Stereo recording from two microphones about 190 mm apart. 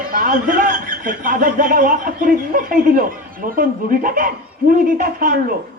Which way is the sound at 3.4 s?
45° right (ahead or behind).